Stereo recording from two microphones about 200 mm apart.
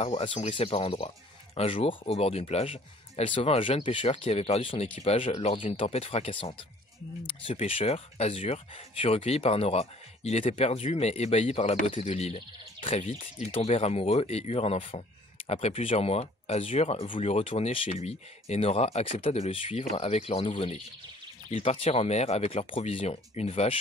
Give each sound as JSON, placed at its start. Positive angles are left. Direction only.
{"t": 0.0, "sound": "speech", "side_deg": 30}